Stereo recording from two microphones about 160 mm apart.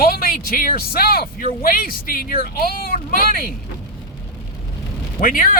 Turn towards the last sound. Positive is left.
turn(degrees=60)  # may be behind; listen again after turning